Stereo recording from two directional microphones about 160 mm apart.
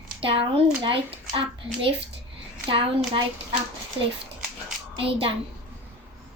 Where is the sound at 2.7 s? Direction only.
35° right (ahead or behind).